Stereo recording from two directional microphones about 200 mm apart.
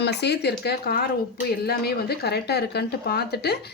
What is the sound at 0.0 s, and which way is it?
Speech, 55° left (ahead or behind).